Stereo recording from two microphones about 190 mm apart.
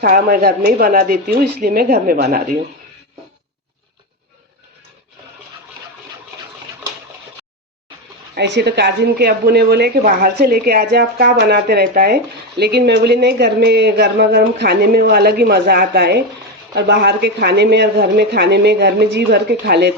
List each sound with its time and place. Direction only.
0.0 s speech: 45° right (ahead or behind)
8.4 s speech: 65° right (ahead or behind)